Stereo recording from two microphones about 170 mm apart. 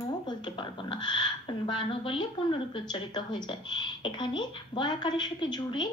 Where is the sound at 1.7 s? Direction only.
30° left (ahead or behind).